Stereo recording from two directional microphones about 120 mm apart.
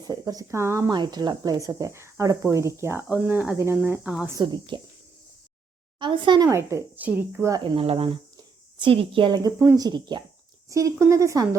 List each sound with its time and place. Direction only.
0.0 s speech: 30° right (ahead or behind)
0.9 s speech: 35° right (ahead or behind); by 4.3 s 5° right (ahead or behind)
4.4 s speech: 40° right (ahead or behind)
6.0 s speech: 40° right (ahead or behind)
6.5 s speech: 25° right (ahead or behind)
7.8 s speech: 50° right (ahead or behind)
10.7 s speech: 25° right (ahead or behind)